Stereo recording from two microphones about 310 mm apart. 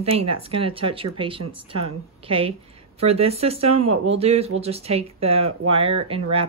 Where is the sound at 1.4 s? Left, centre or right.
Right.